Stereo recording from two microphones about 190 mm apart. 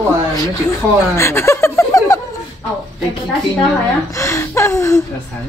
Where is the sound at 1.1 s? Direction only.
15° left (ahead or behind).